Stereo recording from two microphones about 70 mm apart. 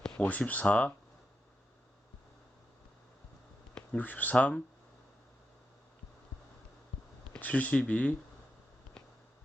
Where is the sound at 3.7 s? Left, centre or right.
Centre.